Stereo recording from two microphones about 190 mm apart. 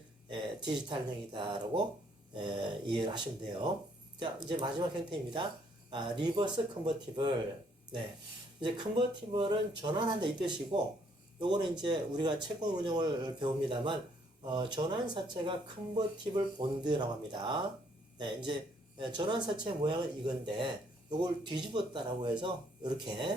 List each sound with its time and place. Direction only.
0.3 s speech: 25° right (ahead or behind)
8.6 s speech: 25° right (ahead or behind)